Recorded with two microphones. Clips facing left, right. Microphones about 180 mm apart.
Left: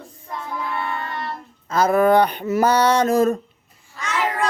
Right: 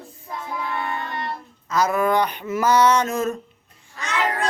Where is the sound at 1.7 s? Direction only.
30° left (ahead or behind).